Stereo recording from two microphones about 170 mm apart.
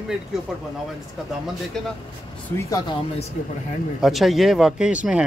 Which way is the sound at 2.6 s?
20° left (ahead or behind).